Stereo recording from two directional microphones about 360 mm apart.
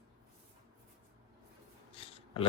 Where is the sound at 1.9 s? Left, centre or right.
Centre.